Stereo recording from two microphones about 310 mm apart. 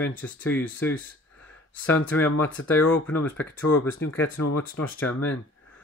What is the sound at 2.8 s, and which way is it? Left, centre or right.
Speech, left.